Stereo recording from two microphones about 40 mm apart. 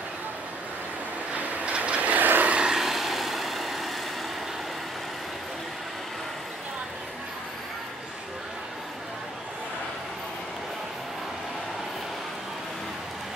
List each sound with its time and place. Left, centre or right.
1.3 s vehicle: right
2.0 s vehicle: right
2.6 s vehicle: centre